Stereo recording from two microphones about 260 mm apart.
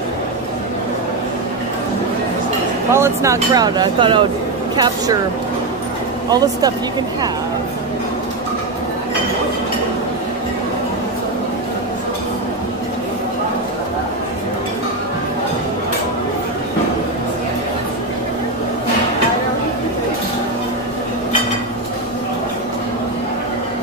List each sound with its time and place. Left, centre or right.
2.9 s speech: centre
6.3 s speech: centre